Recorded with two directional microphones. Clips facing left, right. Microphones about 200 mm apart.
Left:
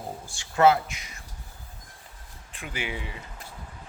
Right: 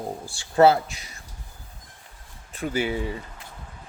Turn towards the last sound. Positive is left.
turn(degrees=-40)  # may be behind; listen again after turning